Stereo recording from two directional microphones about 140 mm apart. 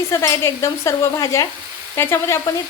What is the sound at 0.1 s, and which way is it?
Speech, 20° left (ahead or behind).